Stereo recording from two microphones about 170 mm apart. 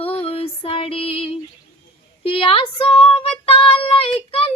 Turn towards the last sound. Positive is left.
turn(degrees=35)  # may be behind; listen again after turning